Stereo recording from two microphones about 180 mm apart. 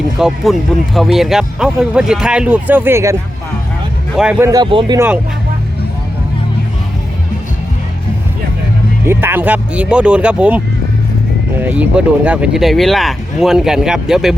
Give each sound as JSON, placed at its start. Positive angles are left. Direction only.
{"t": 0.2, "sound": "speech", "side_deg": -5}
{"t": 4.1, "sound": "speech", "side_deg": -5}
{"t": 4.4, "sound": "speech", "side_deg": -20}
{"t": 4.9, "sound": "speech", "side_deg": -10}
{"t": 9.0, "sound": "speech", "side_deg": -10}
{"t": 11.6, "sound": "speech", "side_deg": -10}